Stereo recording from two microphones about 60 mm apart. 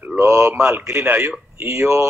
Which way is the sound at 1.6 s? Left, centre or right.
Right.